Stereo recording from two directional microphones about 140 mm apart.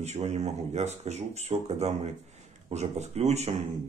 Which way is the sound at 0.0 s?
50° right (ahead or behind).